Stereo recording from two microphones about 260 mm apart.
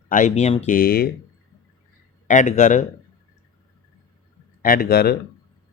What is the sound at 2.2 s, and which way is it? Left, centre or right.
Speech, left.